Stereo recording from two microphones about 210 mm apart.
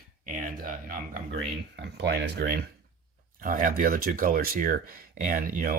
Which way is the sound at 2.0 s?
50° right (ahead or behind).